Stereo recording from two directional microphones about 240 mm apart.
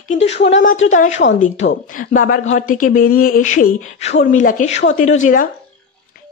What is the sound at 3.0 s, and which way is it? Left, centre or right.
Speech, left.